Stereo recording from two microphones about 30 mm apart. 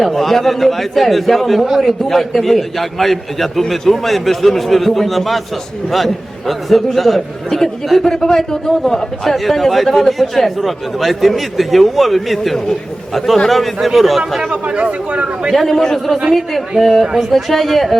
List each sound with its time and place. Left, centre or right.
0.0 s a man's voice: centre
6.5 s speech: centre
8.0 s a man's voice: centre
14.5 s a man's voice: right
15.5 s speech: centre
15.8 s a man's voice: centre
16.3 s speech: centre